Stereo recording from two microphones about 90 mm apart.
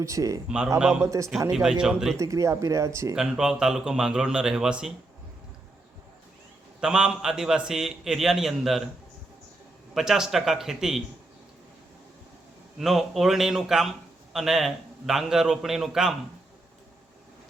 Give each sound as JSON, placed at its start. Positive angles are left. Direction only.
{"t": 0.0, "sound": "speech", "side_deg": -35}
{"t": 0.4, "sound": "speech", "side_deg": -10}
{"t": 2.1, "sound": "speech", "side_deg": -40}
{"t": 3.2, "sound": "speech", "side_deg": -5}
{"t": 6.7, "sound": "a man's voice", "side_deg": -10}
{"t": 9.9, "sound": "a man's voice", "side_deg": -5}
{"t": 12.8, "sound": "a man's voice", "side_deg": 0}